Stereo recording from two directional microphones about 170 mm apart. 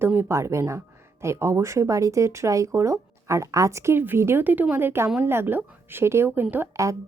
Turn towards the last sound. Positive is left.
turn(degrees=-15)  # may be behind; listen again after turning